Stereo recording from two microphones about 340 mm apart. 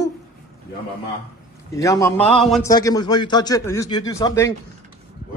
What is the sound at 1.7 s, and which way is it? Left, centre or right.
Speech, centre.